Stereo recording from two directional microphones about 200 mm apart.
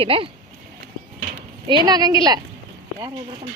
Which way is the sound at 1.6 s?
20° right (ahead or behind).